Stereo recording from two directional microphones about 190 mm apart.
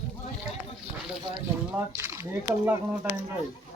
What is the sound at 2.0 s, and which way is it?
Speech, 10° right (ahead or behind).